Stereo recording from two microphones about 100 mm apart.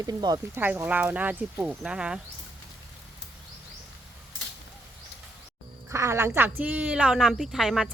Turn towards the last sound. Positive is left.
turn(degrees=-5)  # may be behind; listen again after turning